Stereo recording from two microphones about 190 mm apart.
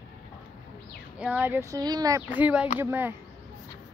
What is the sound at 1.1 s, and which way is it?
Speech, 5° right (ahead or behind).